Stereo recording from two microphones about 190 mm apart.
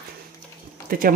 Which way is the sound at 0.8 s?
50° right (ahead or behind).